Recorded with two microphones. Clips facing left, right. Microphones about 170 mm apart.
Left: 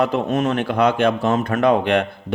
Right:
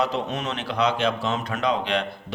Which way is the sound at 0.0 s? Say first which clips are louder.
Left 7 dB; 50° left (ahead or behind).